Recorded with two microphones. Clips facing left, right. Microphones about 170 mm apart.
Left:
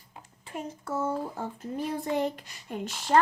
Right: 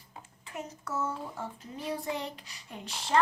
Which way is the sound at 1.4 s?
50° left (ahead or behind).